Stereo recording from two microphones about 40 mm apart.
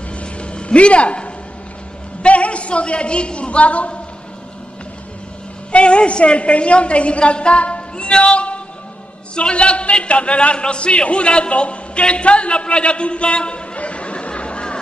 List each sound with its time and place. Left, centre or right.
0.1 s a sound: left
2.2 s a woman's voice: left
5.7 s a woman's voice: left